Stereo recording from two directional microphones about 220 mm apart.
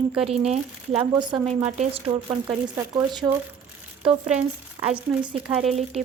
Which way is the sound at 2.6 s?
15° right (ahead or behind).